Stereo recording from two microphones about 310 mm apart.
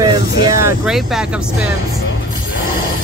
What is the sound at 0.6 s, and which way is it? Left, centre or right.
Music, centre.